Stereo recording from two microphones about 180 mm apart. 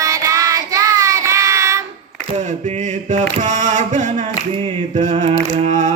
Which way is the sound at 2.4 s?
40° right (ahead or behind).